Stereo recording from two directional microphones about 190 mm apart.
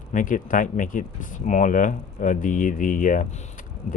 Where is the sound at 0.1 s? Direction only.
45° left (ahead or behind).